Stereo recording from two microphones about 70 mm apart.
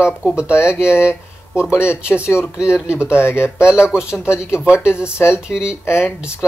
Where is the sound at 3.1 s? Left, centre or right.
Left.